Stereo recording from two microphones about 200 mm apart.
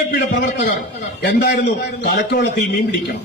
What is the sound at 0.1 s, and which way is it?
A man's voice, 55° left (ahead or behind).